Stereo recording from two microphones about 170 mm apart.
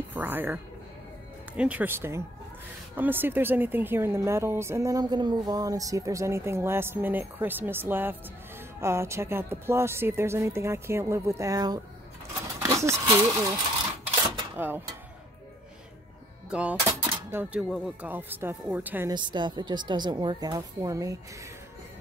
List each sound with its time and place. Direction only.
0.1 s speech: 10° right (ahead or behind)
1.6 s speech: 10° right (ahead or behind)
16.4 s speech: 10° right (ahead or behind)
19.0 s a woman's voice: 25° right (ahead or behind)